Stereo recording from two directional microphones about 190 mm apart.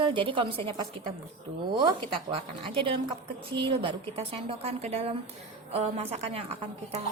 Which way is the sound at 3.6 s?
30° right (ahead or behind).